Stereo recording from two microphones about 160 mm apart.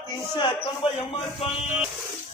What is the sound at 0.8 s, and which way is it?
Speech, 35° left (ahead or behind).